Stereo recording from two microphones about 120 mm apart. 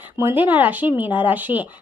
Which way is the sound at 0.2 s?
20° right (ahead or behind).